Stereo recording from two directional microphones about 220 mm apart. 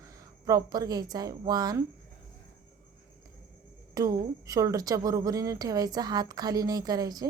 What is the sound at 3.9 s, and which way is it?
Speech, 15° right (ahead or behind).